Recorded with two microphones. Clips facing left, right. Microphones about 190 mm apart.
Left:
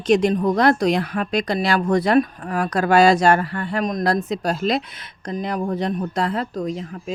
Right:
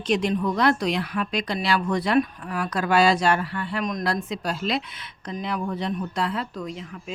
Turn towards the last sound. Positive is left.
turn(degrees=40)  # may be behind; listen again after turning